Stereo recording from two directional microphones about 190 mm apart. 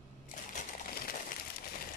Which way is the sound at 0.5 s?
50° left (ahead or behind).